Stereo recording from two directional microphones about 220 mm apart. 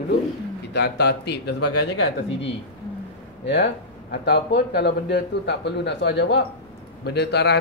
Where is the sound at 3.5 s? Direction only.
50° left (ahead or behind).